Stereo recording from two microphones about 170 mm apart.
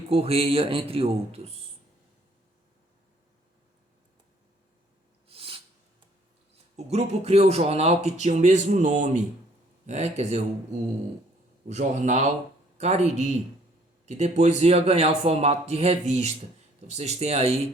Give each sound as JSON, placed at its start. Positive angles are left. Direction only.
{"t": 0.1, "sound": "speech", "side_deg": -35}
{"t": 5.3, "sound": "a sound", "side_deg": -35}
{"t": 6.7, "sound": "speech", "side_deg": -40}
{"t": 11.7, "sound": "a man's voice", "side_deg": -45}